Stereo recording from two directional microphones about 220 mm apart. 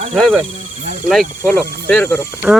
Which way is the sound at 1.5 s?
10° left (ahead or behind).